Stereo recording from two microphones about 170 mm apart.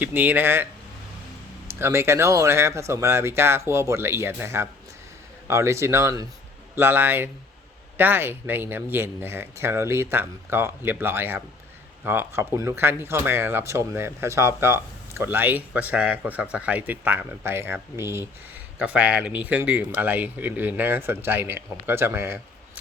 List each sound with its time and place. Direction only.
0.0 s speech: 10° right (ahead or behind)